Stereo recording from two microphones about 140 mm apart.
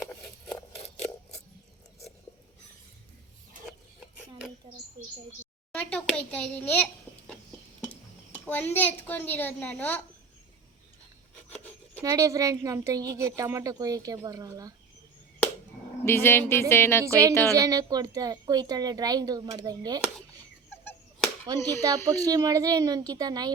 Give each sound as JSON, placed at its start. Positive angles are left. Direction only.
{"t": 0.0, "sound": "a sound", "side_deg": 15}
{"t": 6.1, "sound": "a woman's voice", "side_deg": 10}
{"t": 8.4, "sound": "a woman's voice", "side_deg": 15}
{"t": 11.4, "sound": "rub", "side_deg": 10}
{"t": 12.0, "sound": "a woman's voice", "side_deg": -25}
{"t": 16.0, "sound": "a woman's voice", "side_deg": 15}
{"t": 17.1, "sound": "a woman's voice", "side_deg": -20}
{"t": 21.4, "sound": "a woman's voice", "side_deg": -25}